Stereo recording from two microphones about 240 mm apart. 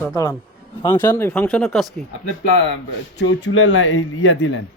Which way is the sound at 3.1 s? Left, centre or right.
Left.